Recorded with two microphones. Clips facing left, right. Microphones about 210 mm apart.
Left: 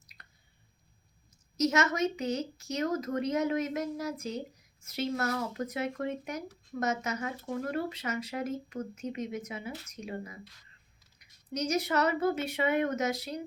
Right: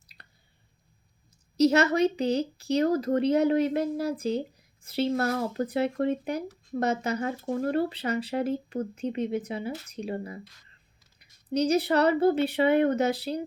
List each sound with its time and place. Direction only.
0.2 s squish: 35° right (ahead or behind)
1.5 s speech: 35° right (ahead or behind)